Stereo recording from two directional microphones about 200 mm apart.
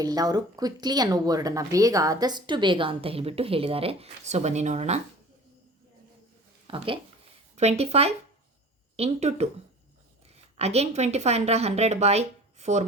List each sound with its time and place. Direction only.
0.0 s speech: 20° right (ahead or behind); by 4.9 s 35° right (ahead or behind)
6.7 s a woman's voice: 25° right (ahead or behind)
10.6 s a woman's voice: 30° right (ahead or behind)